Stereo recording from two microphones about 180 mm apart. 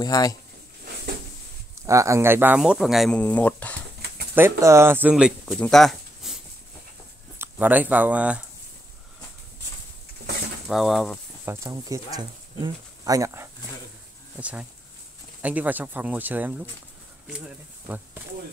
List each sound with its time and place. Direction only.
0.0 s speech: 20° left (ahead or behind)
1.8 s speech: 15° right (ahead or behind); by 3.7 s 10° left (ahead or behind)
4.4 s speech: 15° right (ahead or behind)
10.7 s speech: centre (ahead or behind)
11.4 s speech: 15° right (ahead or behind)
17.8 s a sound: 10° right (ahead or behind)